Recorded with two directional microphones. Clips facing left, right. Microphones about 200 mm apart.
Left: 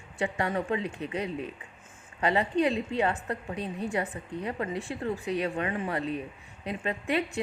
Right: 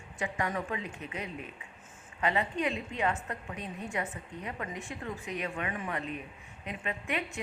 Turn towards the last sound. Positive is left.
turn(degrees=35)  # may be behind; listen again after turning